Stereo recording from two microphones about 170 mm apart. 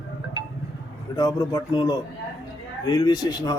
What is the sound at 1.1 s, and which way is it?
Speech, 20° left (ahead or behind).